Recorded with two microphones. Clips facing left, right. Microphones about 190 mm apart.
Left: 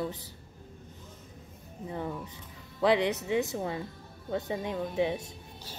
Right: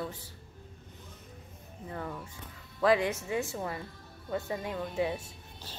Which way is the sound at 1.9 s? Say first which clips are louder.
Left 3 dB; 15° left (ahead or behind).